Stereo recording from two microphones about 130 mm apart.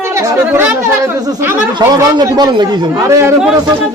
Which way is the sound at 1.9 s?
30° right (ahead or behind).